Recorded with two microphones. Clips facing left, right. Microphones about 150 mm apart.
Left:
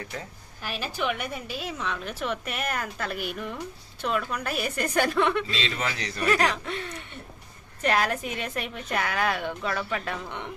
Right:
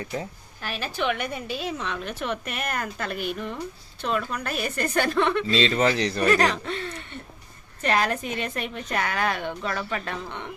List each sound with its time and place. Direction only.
0.6 s a woman's voice: 10° left (ahead or behind)
5.5 s a man's voice: 35° right (ahead or behind)
6.3 s a woman's voice: 5° left (ahead or behind)